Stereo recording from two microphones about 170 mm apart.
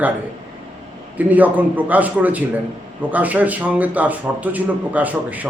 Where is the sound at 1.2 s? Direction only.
10° right (ahead or behind).